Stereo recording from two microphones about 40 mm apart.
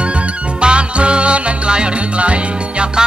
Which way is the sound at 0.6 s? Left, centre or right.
Right.